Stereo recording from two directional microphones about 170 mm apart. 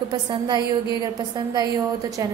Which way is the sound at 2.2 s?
20° right (ahead or behind).